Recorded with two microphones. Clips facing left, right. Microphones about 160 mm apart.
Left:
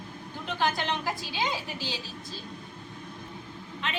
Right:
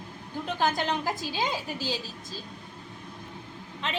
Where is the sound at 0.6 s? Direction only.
40° right (ahead or behind).